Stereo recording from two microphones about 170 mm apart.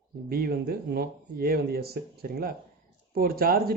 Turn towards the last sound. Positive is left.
turn(degrees=-60)  # may be behind; listen again after turning